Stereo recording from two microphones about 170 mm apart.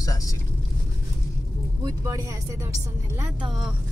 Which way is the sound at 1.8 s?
20° right (ahead or behind).